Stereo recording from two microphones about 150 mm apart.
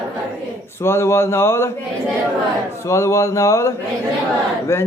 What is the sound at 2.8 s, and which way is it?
Speech, 20° left (ahead or behind).